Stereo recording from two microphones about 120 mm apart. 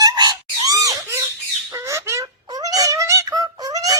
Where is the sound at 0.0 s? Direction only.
35° right (ahead or behind).